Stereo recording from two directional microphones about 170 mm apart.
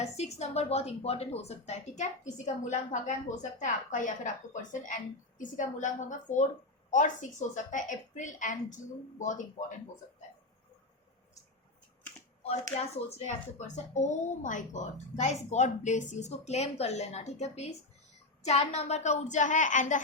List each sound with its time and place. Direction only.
0.0 s speech: 40° left (ahead or behind)
5.4 s a woman's voice: 45° left (ahead or behind)
12.7 s a woman's voice: 40° left (ahead or behind)